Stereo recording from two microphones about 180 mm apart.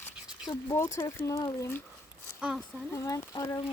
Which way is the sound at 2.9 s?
15° left (ahead or behind).